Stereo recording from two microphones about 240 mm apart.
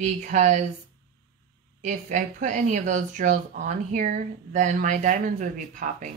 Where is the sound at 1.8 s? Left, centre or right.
Right.